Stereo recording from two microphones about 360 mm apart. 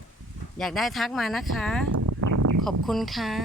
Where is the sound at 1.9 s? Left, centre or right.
Right.